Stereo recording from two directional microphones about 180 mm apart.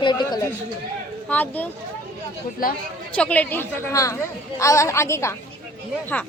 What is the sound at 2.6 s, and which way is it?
Speech, 50° left (ahead or behind).